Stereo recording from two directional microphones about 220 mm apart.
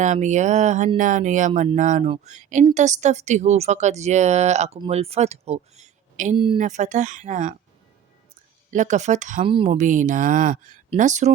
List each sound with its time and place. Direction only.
0.0 s speech: 35° right (ahead or behind)
8.7 s speech: 35° right (ahead or behind)